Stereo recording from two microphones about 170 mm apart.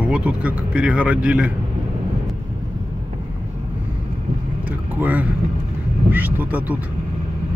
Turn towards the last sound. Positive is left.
turn(degrees=-10)  # may be behind; listen again after turning